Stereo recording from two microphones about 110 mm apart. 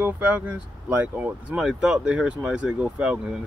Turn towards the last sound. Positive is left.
turn(degrees=-10)  # may be behind; listen again after turning